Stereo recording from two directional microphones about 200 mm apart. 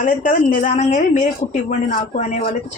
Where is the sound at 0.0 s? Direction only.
40° left (ahead or behind).